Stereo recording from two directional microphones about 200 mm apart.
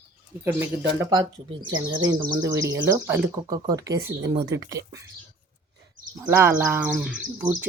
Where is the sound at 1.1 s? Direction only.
25° right (ahead or behind).